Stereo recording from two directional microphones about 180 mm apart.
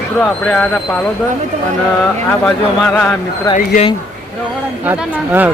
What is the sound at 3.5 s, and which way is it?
Speech, 20° left (ahead or behind).